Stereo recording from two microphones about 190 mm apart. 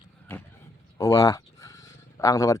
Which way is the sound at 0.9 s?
15° left (ahead or behind).